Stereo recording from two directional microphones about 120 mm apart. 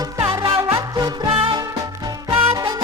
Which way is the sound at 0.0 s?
25° right (ahead or behind).